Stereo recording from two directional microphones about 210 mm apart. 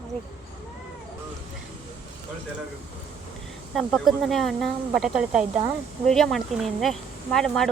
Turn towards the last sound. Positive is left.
turn(degrees=0)  # may be behind; listen again after turning